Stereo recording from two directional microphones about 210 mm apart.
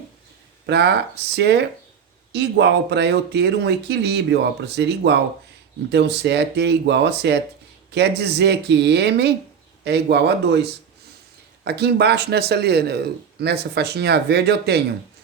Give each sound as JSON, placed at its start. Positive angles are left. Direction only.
{"t": 0.7, "sound": "a man's voice", "side_deg": -50}